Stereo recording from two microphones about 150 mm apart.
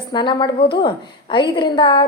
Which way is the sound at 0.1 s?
30° left (ahead or behind).